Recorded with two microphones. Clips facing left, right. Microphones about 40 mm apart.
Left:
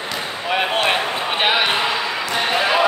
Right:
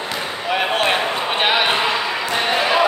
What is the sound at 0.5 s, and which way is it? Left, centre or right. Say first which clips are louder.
Basketball bounce: even; centre.